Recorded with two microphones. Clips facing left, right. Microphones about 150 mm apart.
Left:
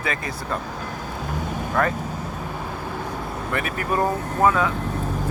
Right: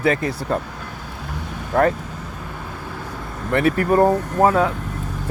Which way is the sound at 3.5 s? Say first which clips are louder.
Right 9 dB; 30° right (ahead or behind).